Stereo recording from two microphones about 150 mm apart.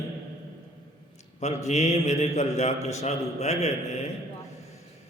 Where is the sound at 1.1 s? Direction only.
50° left (ahead or behind).